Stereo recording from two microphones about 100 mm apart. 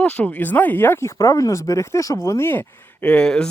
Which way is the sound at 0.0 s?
15° left (ahead or behind).